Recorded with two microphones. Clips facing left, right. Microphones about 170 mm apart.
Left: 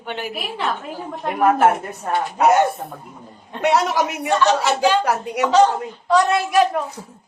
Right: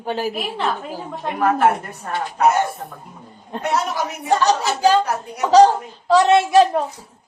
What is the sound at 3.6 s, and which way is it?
Speech, 90° left.